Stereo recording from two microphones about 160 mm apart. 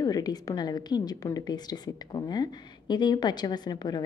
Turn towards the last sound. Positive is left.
turn(degrees=25)  # may be behind; listen again after turning